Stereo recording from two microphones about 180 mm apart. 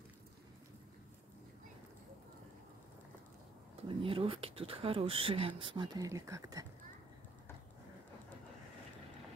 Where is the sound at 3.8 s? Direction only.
30° right (ahead or behind).